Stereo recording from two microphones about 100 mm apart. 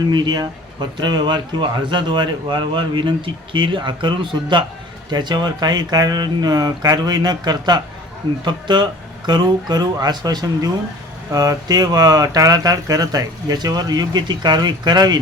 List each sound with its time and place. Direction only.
0.1 s a man's voice: 45° right (ahead or behind)